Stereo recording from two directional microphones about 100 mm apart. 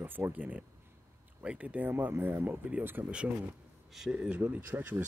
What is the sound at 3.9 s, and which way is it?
Speech, 5° right (ahead or behind).